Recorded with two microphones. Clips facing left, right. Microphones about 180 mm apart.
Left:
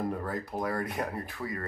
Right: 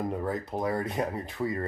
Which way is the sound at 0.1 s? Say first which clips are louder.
Right 3 dB; 20° right (ahead or behind).